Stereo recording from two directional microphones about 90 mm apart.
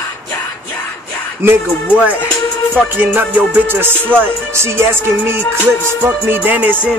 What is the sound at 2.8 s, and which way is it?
Music, 20° right (ahead or behind).